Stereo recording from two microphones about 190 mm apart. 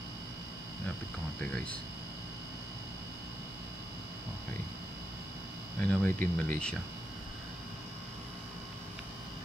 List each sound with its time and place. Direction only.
5.8 s speech: 10° left (ahead or behind)